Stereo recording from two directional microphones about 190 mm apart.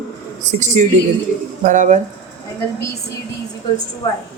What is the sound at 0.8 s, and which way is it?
Speech, 40° right (ahead or behind).